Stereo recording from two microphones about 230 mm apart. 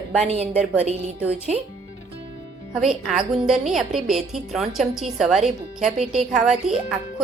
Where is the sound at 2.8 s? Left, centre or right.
Centre.